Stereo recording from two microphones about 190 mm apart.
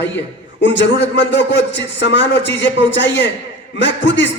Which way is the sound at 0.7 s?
70° left (ahead or behind).